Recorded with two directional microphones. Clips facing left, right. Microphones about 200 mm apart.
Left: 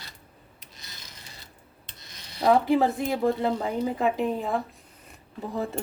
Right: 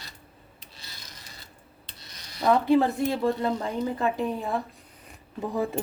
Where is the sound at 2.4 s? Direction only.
10° left (ahead or behind).